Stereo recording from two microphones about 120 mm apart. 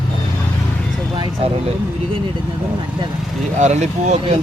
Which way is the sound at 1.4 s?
55° right (ahead or behind).